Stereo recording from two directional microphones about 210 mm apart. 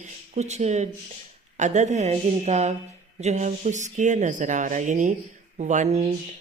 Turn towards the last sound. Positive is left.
turn(degrees=-35)  # may be behind; listen again after turning